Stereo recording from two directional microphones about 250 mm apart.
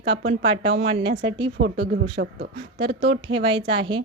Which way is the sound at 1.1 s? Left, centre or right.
Right.